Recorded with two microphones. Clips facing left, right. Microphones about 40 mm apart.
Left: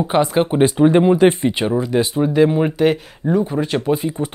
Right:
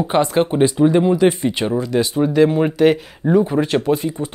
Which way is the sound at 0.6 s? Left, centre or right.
Left.